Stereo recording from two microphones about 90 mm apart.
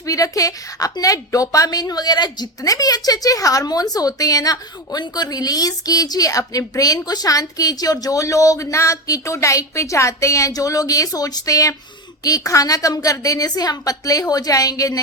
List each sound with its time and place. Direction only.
0.0 s a woman's voice: 40° left (ahead or behind)